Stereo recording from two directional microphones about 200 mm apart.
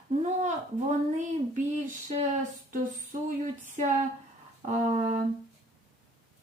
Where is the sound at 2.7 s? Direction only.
40° right (ahead or behind).